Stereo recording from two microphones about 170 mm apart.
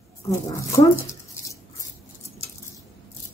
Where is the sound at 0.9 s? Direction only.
15° left (ahead or behind).